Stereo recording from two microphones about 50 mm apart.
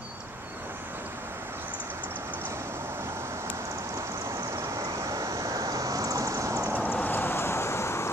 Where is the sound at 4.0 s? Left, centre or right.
Right.